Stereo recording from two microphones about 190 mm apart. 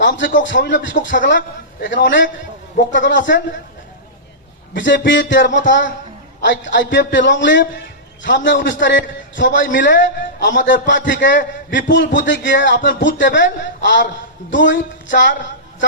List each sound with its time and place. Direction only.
0.3 s a man's voice: 70° left (ahead or behind)
4.7 s a man's voice: 75° left (ahead or behind)